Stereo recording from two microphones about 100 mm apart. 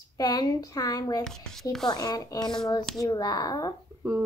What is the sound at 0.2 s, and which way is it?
A child's voice, 40° left (ahead or behind).